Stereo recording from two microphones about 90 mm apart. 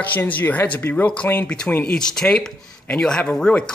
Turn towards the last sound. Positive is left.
turn(degrees=10)  # may be behind; listen again after turning